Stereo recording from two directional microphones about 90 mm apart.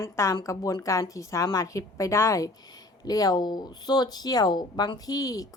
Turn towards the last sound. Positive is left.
turn(degrees=45)  # may be behind; listen again after turning